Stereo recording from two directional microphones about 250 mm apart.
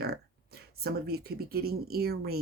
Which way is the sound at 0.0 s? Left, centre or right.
Right.